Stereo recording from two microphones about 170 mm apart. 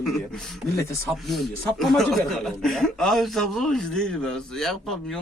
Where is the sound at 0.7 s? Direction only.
15° left (ahead or behind).